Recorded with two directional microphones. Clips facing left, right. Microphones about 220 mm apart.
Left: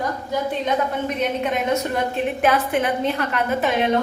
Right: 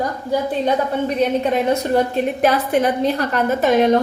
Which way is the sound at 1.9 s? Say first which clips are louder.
Right 5 dB; 35° right (ahead or behind).